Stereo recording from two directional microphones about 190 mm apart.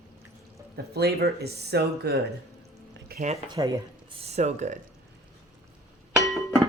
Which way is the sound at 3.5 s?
20° right (ahead or behind).